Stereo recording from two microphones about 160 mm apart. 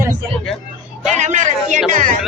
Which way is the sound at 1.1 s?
50° right (ahead or behind).